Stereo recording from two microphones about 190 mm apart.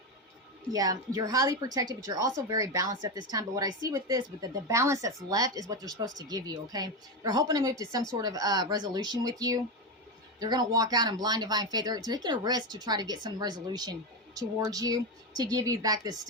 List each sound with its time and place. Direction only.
0.7 s speech: 20° right (ahead or behind)